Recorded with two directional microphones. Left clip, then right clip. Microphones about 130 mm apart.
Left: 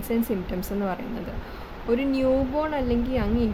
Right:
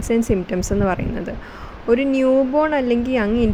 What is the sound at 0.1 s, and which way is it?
Speech, 55° right (ahead or behind).